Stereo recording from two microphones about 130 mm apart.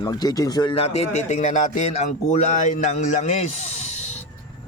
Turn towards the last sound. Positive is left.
turn(degrees=60)  # may be behind; listen again after turning